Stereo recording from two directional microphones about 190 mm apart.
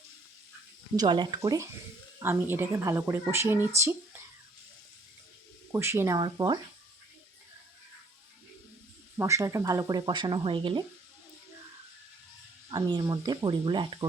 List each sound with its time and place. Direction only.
0.9 s speech: 25° right (ahead or behind)
5.7 s speech: 15° right (ahead or behind)
9.1 s speech: 15° right (ahead or behind)
12.7 s speech: 20° right (ahead or behind)